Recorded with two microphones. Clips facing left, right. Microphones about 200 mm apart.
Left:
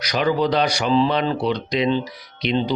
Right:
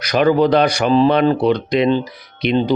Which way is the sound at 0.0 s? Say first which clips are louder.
Right 6 dB; 55° right (ahead or behind).